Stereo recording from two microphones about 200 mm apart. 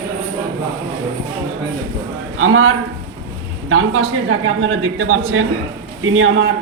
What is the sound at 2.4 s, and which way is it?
Speech, 90° right.